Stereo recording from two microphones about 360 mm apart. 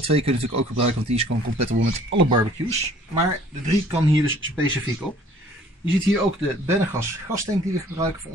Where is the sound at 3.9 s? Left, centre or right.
Centre.